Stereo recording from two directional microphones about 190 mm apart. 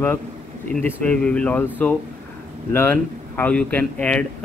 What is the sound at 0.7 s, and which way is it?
Speech, 5° left (ahead or behind).